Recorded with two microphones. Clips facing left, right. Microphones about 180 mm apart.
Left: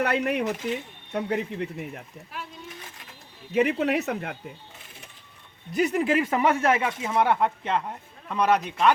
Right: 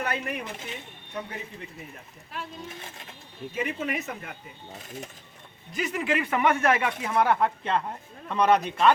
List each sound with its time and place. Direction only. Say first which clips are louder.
0.0 s speech: left 7 dB; 70° left (ahead or behind)
3.5 s speech: left 8 dB; 70° left (ahead or behind)
5.7 s a man's voice: left 5 dB; 40° left (ahead or behind); by 8.9 s 10° left (ahead or behind)